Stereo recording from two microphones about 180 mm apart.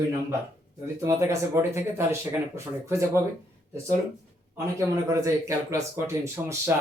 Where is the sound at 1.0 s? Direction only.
15° right (ahead or behind).